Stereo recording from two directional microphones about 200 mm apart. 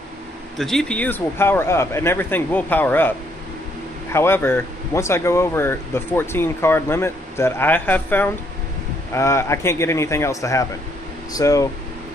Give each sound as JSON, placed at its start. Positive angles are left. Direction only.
{"t": 0.6, "sound": "speech", "side_deg": 0}
{"t": 4.1, "sound": "speech", "side_deg": 10}